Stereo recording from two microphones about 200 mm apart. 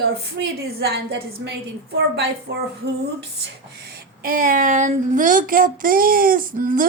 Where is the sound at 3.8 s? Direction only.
50° right (ahead or behind).